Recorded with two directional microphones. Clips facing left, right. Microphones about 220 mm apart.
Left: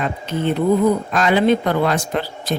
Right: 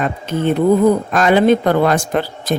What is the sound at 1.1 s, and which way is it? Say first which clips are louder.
Speech: right 4 dB; 50° right (ahead or behind).